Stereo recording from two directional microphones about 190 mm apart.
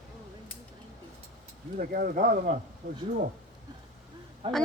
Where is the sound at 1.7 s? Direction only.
50° right (ahead or behind).